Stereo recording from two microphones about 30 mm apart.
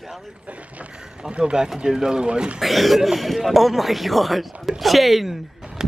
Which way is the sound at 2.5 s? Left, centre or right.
Centre.